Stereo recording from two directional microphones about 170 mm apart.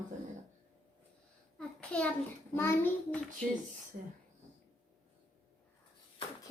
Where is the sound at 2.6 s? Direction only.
10° left (ahead or behind).